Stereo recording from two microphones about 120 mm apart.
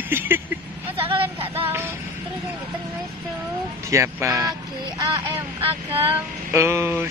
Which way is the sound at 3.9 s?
25° right (ahead or behind).